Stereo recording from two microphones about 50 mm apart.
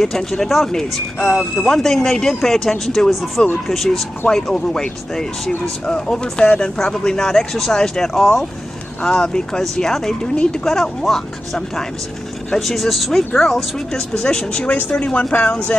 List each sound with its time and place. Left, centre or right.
0.0 s speech: centre
5.9 s speech: centre
9.0 s speech: centre
13.9 s speech: centre